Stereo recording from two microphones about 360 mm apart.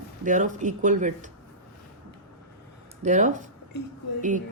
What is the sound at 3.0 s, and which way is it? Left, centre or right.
Speech, centre.